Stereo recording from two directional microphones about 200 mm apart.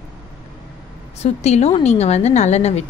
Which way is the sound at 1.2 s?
35° left (ahead or behind).